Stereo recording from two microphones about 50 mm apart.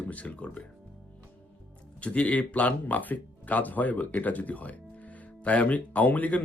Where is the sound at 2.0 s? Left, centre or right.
Left.